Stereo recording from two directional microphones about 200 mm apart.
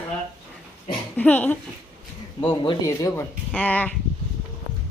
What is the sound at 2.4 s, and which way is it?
Speech, 25° left (ahead or behind).